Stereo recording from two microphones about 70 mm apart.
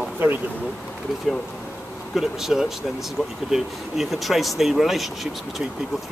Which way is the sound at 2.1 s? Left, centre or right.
Centre.